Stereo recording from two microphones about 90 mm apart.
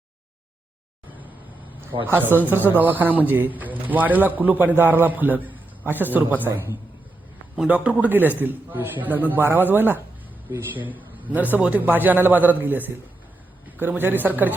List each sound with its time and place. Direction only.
2.0 s a man's voice: 20° right (ahead or behind)
7.7 s a man's voice: 15° right (ahead or behind)